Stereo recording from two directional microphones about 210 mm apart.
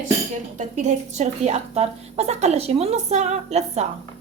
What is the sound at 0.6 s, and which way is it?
A woman's voice, 35° right (ahead or behind).